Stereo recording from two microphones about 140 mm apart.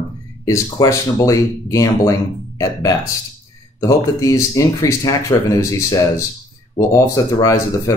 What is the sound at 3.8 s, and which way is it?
Speech, 25° left (ahead or behind).